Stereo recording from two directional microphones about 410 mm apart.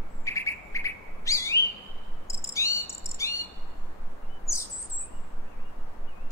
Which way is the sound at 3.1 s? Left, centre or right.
Centre.